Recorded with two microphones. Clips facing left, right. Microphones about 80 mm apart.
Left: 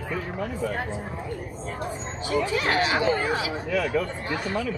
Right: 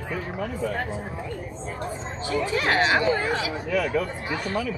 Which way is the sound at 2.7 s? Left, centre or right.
Right.